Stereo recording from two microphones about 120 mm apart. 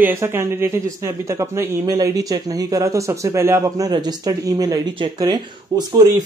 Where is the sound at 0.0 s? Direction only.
20° right (ahead or behind).